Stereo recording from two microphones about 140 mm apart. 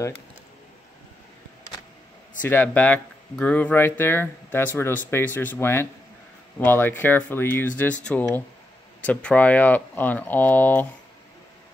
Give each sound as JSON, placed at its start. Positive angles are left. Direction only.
{"t": 2.4, "sound": "speech", "side_deg": 15}